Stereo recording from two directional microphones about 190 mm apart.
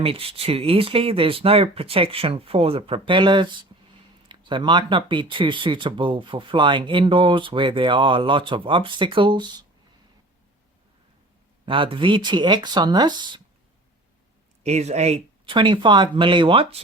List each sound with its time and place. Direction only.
0.0 s speech: 30° right (ahead or behind)
11.6 s speech: 25° right (ahead or behind)
14.6 s speech: 35° right (ahead or behind)